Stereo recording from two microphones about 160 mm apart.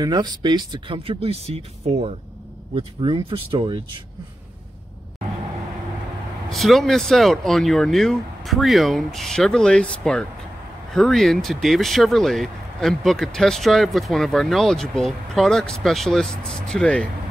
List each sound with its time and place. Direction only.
0.0 s speech: 25° right (ahead or behind)
6.5 s speech: centre (ahead or behind)